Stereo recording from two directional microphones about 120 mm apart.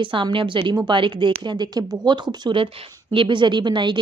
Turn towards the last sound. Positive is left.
turn(degrees=-40)  # may be behind; listen again after turning